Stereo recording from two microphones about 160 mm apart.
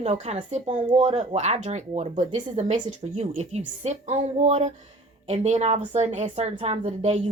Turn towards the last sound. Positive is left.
turn(degrees=-45)  # may be behind; listen again after turning